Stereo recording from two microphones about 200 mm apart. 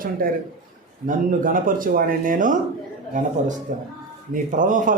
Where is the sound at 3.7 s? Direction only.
40° right (ahead or behind).